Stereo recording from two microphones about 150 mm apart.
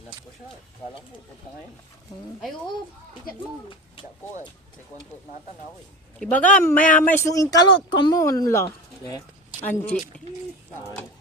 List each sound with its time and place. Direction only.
6.1 s speech: 10° left (ahead or behind); by 8.2 s 30° left (ahead or behind)
8.2 s speech: 20° left (ahead or behind)